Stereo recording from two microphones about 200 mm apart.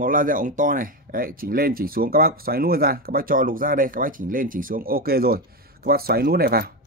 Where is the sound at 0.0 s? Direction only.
45° right (ahead or behind).